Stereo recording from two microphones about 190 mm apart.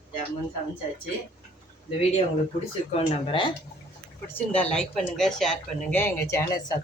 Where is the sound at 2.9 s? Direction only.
30° left (ahead or behind).